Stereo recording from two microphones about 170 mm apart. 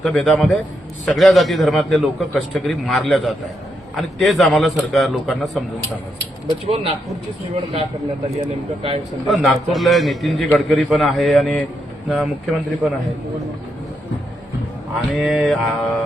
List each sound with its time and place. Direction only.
0.0 s a man's voice: centre (ahead or behind)
6.7 s speech: 35° right (ahead or behind)
8.4 s speech: 35° right (ahead or behind)
9.3 s a man's voice: centre (ahead or behind)
15.1 s a man's voice: centre (ahead or behind)